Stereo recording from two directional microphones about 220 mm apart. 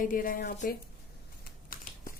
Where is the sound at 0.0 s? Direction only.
40° left (ahead or behind).